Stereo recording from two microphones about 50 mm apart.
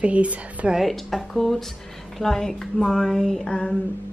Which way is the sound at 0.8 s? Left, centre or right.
Centre.